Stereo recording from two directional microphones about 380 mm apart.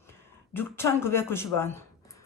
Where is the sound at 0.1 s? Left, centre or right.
Centre.